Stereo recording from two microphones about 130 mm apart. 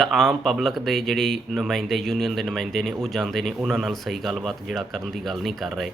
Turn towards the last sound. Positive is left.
turn(degrees=0)  # may be behind; listen again after turning